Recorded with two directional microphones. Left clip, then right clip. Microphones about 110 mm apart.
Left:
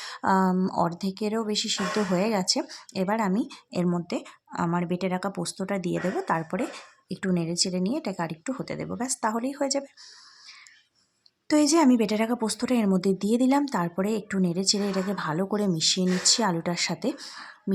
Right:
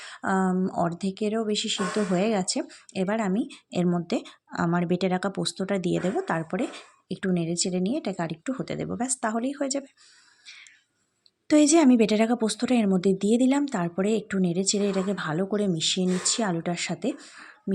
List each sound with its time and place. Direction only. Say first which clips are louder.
0.0 s a sound: left 3 dB; centre (ahead or behind)
0.5 s speech: even; 5° left (ahead or behind)
0.8 s speech: even; 10° right (ahead or behind)
11.4 s speech: right 2 dB; 20° right (ahead or behind); by 17.2 s centre (ahead or behind)
17.2 s speech: left 5 dB; 15° left (ahead or behind)